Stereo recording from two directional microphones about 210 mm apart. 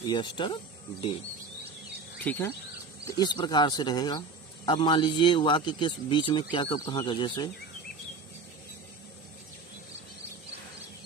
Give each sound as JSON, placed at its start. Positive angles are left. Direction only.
{"t": 0.0, "sound": "a man's voice", "side_deg": 20}
{"t": 2.2, "sound": "insect", "side_deg": 10}
{"t": 3.1, "sound": "a man's voice", "side_deg": 20}